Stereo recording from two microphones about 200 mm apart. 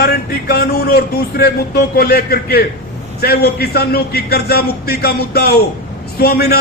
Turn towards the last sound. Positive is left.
turn(degrees=50)  # may be behind; listen again after turning